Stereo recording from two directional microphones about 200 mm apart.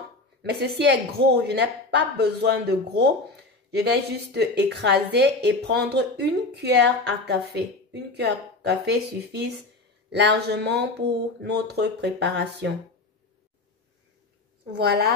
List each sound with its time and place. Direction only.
0.4 s a woman's voice: 55° right (ahead or behind)
14.8 s a woman's voice: 50° right (ahead or behind)